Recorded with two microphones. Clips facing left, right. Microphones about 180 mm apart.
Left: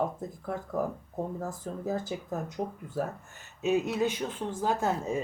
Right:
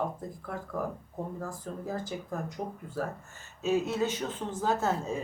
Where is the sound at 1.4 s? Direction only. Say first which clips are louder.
Left 2 dB; 20° left (ahead or behind).